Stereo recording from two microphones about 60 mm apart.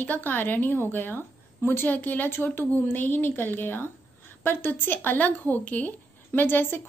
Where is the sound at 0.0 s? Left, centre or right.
Left.